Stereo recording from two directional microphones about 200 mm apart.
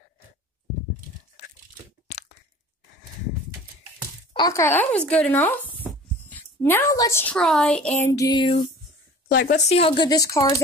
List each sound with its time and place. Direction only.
2.0 s a sound: 35° left (ahead or behind)
4.3 s a woman's voice: 20° left (ahead or behind)
8.1 s speech: 20° left (ahead or behind)
9.3 s speech: 50° left (ahead or behind)
9.6 s speech: 30° left (ahead or behind)